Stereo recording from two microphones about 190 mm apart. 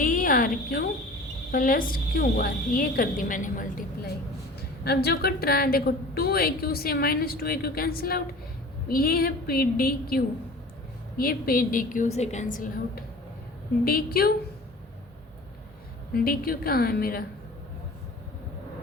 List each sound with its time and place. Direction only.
0.0 s a woman's voice: 45° left (ahead or behind)
16.1 s a woman's voice: 50° left (ahead or behind)